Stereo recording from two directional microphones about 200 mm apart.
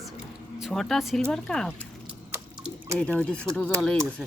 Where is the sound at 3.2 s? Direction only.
5° left (ahead or behind).